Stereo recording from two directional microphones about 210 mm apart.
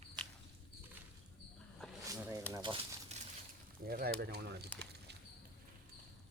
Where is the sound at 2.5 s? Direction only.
20° right (ahead or behind).